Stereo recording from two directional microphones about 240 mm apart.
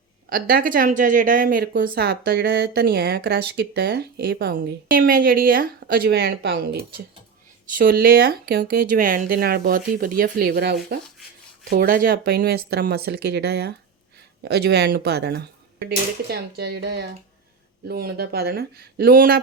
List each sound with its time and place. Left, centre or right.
0.3 s speech: right